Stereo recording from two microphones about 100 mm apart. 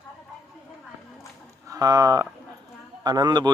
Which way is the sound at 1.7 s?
35° right (ahead or behind).